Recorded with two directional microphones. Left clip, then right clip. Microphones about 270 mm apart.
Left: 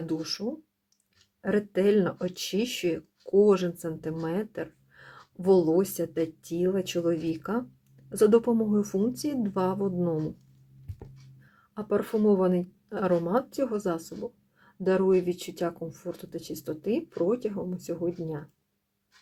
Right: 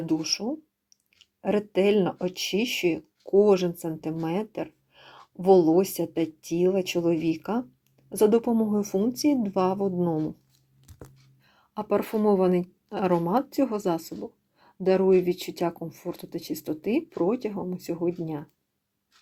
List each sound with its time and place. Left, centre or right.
0.1 s speech: centre
11.7 s speech: centre